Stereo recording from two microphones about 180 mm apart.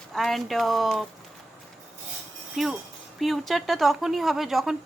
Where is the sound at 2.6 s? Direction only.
Centre (ahead or behind).